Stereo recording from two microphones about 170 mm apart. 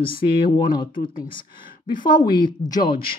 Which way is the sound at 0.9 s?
55° left (ahead or behind).